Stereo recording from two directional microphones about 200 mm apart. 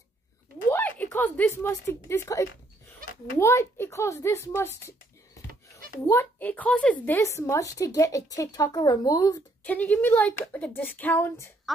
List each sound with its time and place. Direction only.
0.7 s a woman's voice: 10° left (ahead or behind)
6.0 s a woman's voice: 10° left (ahead or behind)